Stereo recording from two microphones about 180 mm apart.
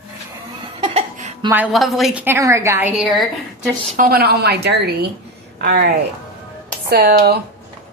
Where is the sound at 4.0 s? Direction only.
60° right (ahead or behind).